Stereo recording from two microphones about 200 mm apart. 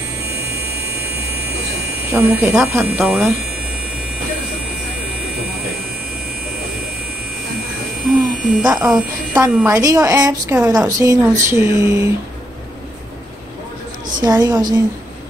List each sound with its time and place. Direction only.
0.6 s a sound: 55° right (ahead or behind)
2.0 s a woman's voice: 15° right (ahead or behind)
2.8 s speech: centre (ahead or behind)
8.2 s a woman's voice: 5° right (ahead or behind)
14.2 s a woman's voice: 20° right (ahead or behind)